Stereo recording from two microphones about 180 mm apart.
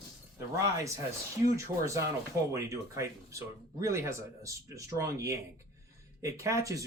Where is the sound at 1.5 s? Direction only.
15° right (ahead or behind).